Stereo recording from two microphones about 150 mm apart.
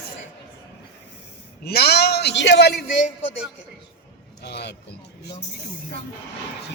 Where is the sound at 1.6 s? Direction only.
90° left.